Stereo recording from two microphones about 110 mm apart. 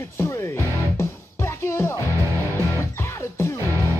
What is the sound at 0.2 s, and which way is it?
Music, 25° left (ahead or behind).